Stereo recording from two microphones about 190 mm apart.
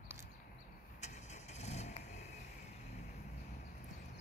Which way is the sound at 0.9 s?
40° left (ahead or behind).